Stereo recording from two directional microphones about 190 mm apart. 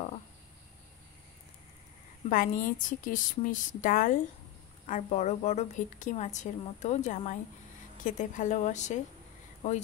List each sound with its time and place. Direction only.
2.2 s a woman's voice: 45° left (ahead or behind)